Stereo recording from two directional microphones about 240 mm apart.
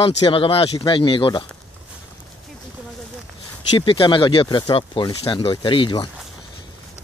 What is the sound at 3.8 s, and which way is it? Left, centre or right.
Speech, left.